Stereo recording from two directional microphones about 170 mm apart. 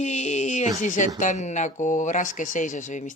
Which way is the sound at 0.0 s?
40° left (ahead or behind).